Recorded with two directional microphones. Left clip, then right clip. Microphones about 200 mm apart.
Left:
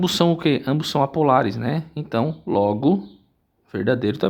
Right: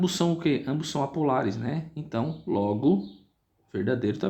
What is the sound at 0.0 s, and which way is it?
Speech, 45° left (ahead or behind).